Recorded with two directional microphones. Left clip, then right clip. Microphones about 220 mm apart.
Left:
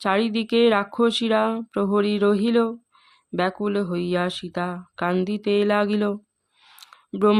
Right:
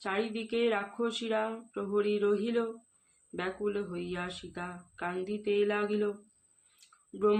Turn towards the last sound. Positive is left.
turn(degrees=55)  # may be behind; listen again after turning